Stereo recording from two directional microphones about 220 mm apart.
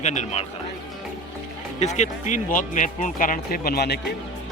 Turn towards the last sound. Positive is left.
turn(degrees=50)  # may be behind; listen again after turning